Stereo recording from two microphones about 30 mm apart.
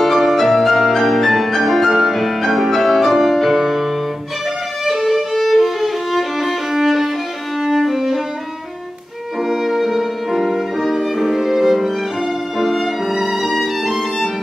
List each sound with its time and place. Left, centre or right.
0.0 s music: centre
4.8 s violin: centre
9.4 s music: centre